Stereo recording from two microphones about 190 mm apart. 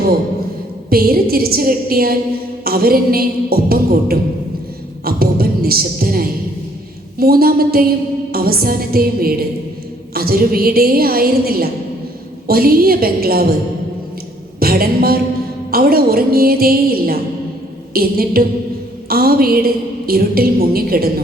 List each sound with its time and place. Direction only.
0.9 s music: 50° right (ahead or behind)
14.6 s a sound: 50° right (ahead or behind)
15.7 s music: 50° right (ahead or behind)